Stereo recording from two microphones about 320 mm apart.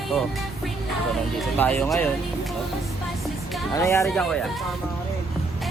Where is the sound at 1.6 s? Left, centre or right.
Centre.